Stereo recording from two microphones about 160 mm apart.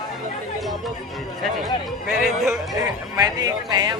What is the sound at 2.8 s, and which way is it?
Speech, 20° right (ahead or behind).